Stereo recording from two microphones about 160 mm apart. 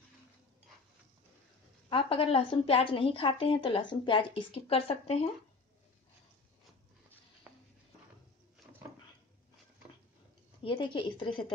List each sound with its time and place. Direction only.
1.9 s a woman's voice: 35° left (ahead or behind)
10.6 s a woman's voice: 30° left (ahead or behind)